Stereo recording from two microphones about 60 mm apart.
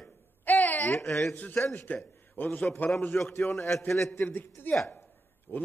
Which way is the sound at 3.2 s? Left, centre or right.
Left.